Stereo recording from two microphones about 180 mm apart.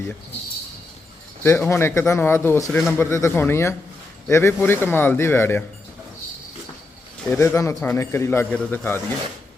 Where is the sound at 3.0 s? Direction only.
15° left (ahead or behind).